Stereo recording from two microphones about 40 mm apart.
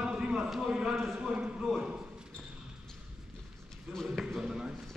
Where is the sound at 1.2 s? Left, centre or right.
Right.